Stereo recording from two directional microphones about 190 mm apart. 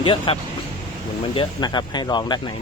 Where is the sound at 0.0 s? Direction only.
25° left (ahead or behind).